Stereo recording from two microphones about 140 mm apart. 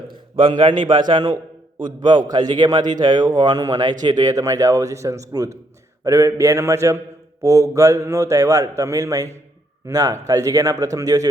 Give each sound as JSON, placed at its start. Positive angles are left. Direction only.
{"t": 0.3, "sound": "a man's voice", "side_deg": -35}